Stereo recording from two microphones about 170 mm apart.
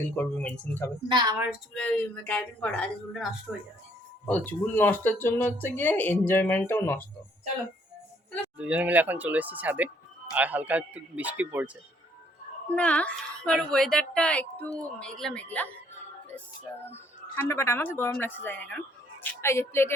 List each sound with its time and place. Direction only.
0.2 s a woman's voice: 10° left (ahead or behind)
1.1 s a woman's voice: 25° right (ahead or behind)
1.7 s a woman's voice: 5° left (ahead or behind)
4.3 s a woman's voice: 10° left (ahead or behind)
8.5 s speech: 10° right (ahead or behind)
12.7 s a woman's voice: 5° left (ahead or behind)
16.8 s a woman's voice: 15° left (ahead or behind)